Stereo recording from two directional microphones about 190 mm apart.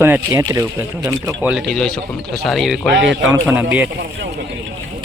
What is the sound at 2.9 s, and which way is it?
Speech, 65° right (ahead or behind).